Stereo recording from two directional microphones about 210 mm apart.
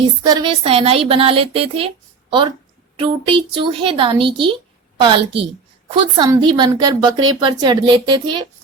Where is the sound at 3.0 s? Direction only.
25° right (ahead or behind).